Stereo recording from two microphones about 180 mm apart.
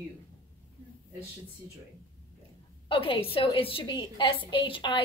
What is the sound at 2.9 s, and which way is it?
A woman's voice, 30° left (ahead or behind).